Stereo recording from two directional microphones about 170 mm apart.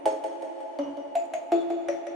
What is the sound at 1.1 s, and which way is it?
Music, centre (ahead or behind).